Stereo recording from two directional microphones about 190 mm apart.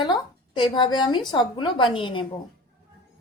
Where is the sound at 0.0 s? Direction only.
25° left (ahead or behind).